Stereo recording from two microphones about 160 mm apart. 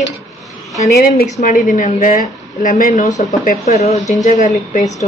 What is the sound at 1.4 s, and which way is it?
A woman's voice, 55° left (ahead or behind).